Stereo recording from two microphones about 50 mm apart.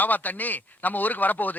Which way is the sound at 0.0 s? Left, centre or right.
Left.